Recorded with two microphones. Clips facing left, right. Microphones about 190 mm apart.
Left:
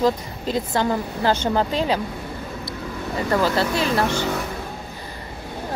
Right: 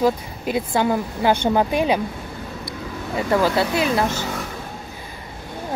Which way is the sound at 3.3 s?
10° right (ahead or behind).